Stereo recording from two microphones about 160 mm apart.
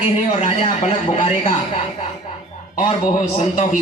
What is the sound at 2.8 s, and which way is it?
Speech, 45° left (ahead or behind).